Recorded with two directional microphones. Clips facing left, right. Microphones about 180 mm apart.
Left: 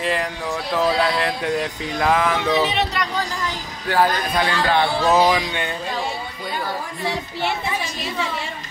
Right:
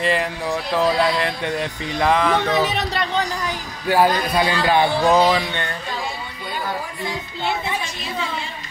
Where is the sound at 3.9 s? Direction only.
15° right (ahead or behind).